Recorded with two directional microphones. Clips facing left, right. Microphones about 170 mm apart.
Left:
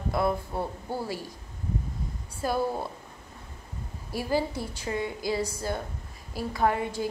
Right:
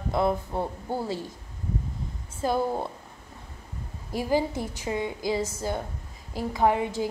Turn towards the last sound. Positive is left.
turn(degrees=-15)  # may be behind; listen again after turning